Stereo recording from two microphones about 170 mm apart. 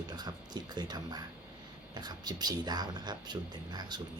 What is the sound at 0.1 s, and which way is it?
Speech, 25° right (ahead or behind).